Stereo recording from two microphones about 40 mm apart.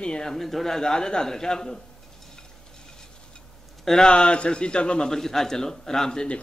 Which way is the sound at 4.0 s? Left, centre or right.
Left.